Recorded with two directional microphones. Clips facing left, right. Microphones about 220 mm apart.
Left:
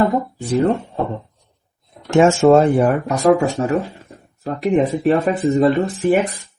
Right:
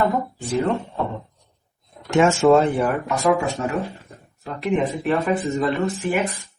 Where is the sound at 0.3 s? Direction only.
35° left (ahead or behind).